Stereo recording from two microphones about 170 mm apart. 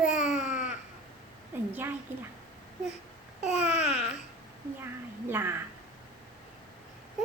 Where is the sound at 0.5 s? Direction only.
45° left (ahead or behind).